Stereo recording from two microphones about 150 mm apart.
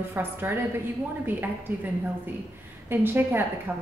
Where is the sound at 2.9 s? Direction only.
15° right (ahead or behind).